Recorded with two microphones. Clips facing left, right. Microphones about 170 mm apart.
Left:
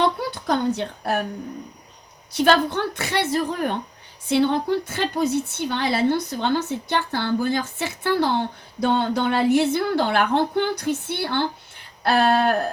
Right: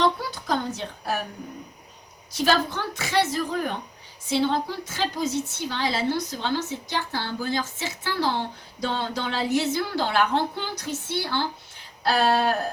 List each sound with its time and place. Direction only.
0.3 s a woman's voice: 60° left (ahead or behind)
2.3 s a woman's voice: 60° left (ahead or behind)